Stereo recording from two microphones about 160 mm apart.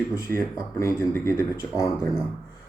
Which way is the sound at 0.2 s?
20° left (ahead or behind).